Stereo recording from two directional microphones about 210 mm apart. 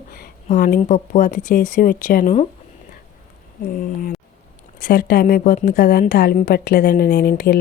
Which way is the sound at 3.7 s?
45° left (ahead or behind).